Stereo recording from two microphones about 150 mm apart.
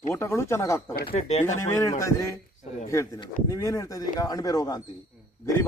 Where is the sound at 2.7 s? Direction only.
50° left (ahead or behind).